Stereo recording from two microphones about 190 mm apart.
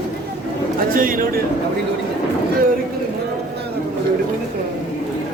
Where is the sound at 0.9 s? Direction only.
45° right (ahead or behind).